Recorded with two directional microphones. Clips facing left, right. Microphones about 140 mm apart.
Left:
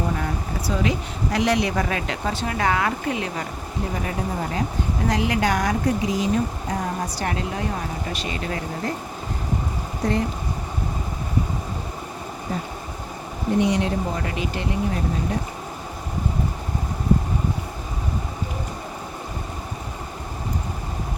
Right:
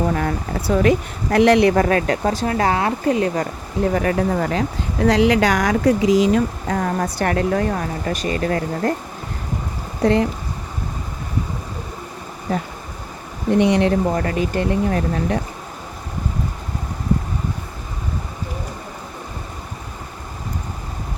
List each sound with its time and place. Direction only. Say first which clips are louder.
0.1 s speech: right 5 dB; 65° right (ahead or behind); by 3.4 s 40° right (ahead or behind)
3.9 s speech: right 8 dB; 70° right (ahead or behind); by 9.0 s 50° right (ahead or behind)
10.0 s speech: right 7 dB; 90° right
12.5 s speech: right 6 dB; 85° right
13.5 s speech: right 5 dB; 70° right (ahead or behind)
14.3 s speech: right 6 dB; 50° right (ahead or behind)
14.8 s speech: right 5 dB; 65° right (ahead or behind)